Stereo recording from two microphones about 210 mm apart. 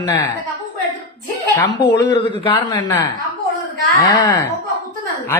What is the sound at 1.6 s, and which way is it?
Speech, 55° left (ahead or behind).